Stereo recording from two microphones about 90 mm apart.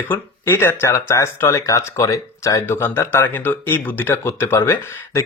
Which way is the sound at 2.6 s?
25° left (ahead or behind).